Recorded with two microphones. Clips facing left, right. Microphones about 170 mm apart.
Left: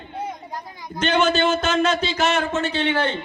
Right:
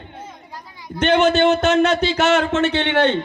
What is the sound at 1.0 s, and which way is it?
A man's voice, 60° right (ahead or behind).